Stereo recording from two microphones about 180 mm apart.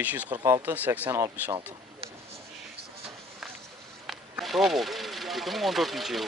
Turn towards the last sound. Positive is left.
turn(degrees=0)  # may be behind; listen again after turning